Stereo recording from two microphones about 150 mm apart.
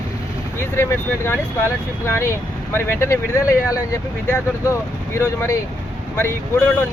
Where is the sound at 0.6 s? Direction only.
15° left (ahead or behind).